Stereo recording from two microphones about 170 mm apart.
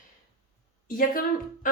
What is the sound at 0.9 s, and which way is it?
Speech, 55° left (ahead or behind).